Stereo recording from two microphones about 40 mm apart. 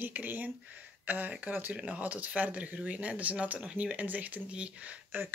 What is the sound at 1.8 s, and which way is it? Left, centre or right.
Speech, right.